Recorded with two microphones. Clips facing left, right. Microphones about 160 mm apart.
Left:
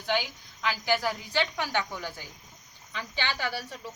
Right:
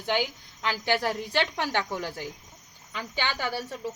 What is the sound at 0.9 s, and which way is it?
Speech, 65° right (ahead or behind).